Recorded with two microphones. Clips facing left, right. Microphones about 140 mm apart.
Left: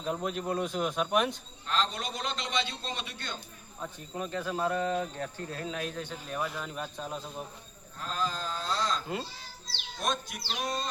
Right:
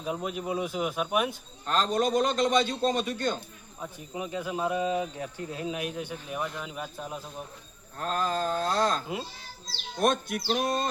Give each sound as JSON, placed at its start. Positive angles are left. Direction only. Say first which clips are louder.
{"t": 0.0, "sound": "speech", "louder": "even", "side_deg": -5}
{"t": 1.6, "sound": "a man's voice", "louder": "right 6 dB", "side_deg": -45}
{"t": 3.8, "sound": "speech", "louder": "right 1 dB", "side_deg": -10}
{"t": 7.9, "sound": "a man's voice", "louder": "right 5 dB", "side_deg": -55}